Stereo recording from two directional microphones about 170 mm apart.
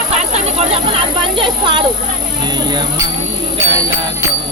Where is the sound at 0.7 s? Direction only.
30° right (ahead or behind).